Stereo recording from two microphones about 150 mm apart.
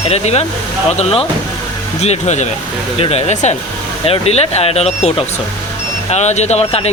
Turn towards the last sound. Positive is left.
turn(degrees=45)  # may be behind; listen again after turning